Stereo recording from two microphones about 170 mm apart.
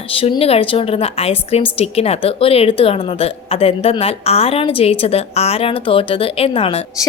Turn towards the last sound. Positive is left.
turn(degrees=35)  # may be behind; listen again after turning